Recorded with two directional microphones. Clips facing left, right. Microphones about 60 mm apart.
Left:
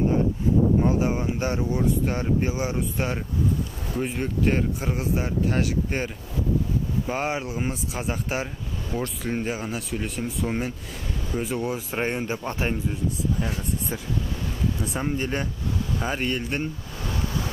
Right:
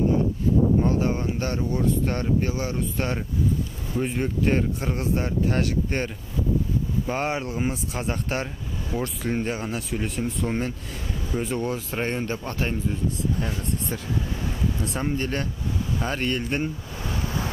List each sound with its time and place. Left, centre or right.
0.8 s speech: centre
4.0 s speech: centre
13.4 s speech: centre